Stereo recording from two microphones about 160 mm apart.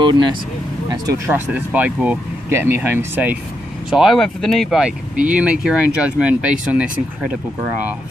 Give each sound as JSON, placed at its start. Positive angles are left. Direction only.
{"t": 0.0, "sound": "speech", "side_deg": -30}
{"t": 1.0, "sound": "speech", "side_deg": -15}